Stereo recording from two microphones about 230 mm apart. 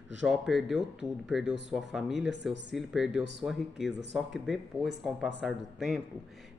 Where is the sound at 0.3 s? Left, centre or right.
Centre.